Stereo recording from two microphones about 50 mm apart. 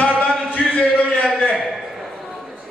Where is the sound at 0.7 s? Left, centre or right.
Left.